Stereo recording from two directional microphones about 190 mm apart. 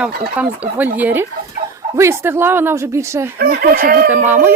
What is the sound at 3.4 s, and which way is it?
Speech, 50° right (ahead or behind).